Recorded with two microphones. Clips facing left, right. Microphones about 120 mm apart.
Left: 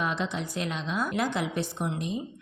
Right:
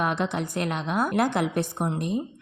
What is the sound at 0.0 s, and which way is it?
A woman's voice, 55° right (ahead or behind).